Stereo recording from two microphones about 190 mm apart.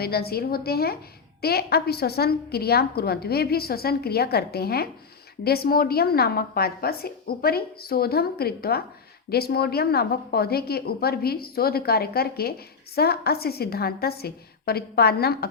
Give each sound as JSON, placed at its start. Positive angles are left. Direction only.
{"t": 0.0, "sound": "a woman's voice", "side_deg": 55}